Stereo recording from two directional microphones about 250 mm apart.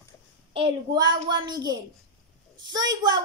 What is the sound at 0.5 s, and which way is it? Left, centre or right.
A child's voice, centre.